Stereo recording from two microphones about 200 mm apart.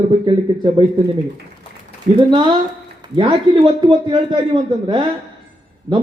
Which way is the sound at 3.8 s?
25° right (ahead or behind).